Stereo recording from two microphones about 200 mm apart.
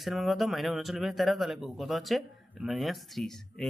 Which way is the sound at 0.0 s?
Centre (ahead or behind).